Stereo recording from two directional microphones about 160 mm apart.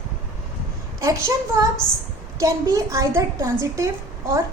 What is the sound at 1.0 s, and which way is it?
A woman's voice, 20° right (ahead or behind).